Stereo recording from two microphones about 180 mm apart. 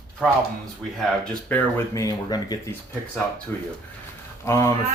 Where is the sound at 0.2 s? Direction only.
5° left (ahead or behind).